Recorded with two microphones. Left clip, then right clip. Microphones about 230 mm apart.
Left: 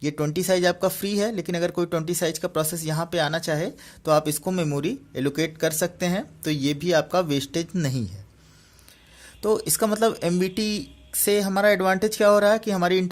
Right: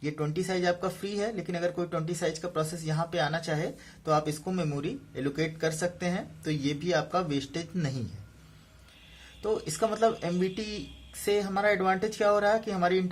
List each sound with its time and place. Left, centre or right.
0.0 s speech: left
9.4 s speech: left